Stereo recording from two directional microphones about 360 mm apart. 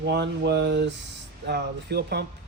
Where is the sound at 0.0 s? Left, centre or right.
Right.